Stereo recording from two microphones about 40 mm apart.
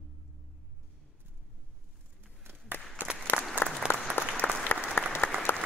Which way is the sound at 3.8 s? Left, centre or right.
Right.